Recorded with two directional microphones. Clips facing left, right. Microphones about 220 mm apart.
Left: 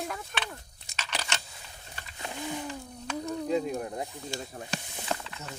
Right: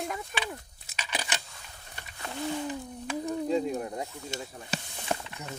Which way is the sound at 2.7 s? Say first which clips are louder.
Right 3 dB; 15° right (ahead or behind).